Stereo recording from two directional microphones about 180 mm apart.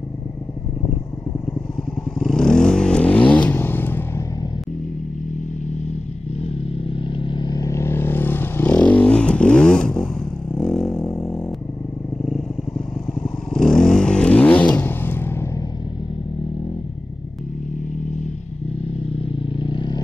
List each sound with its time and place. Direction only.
2.1 s vehicle: 5° left (ahead or behind)
6.4 s vehicle: 30° left (ahead or behind); by 11.0 s 5° left (ahead or behind)
11.0 s a sound: 15° left (ahead or behind)
12.3 s vehicle: centre (ahead or behind)
18.0 s vehicle: 40° left (ahead or behind); by 20.0 s 25° left (ahead or behind)